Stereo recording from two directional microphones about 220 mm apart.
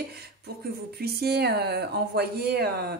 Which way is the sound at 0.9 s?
45° right (ahead or behind).